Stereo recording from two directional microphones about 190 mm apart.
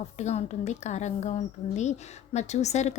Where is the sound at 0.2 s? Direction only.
35° left (ahead or behind).